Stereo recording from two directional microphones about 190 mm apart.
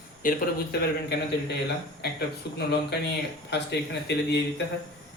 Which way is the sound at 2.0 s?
60° left (ahead or behind).